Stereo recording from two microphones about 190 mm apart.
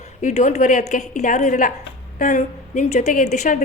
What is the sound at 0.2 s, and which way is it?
A woman's voice, 40° left (ahead or behind).